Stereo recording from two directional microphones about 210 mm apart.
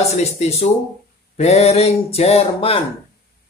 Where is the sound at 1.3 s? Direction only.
30° left (ahead or behind).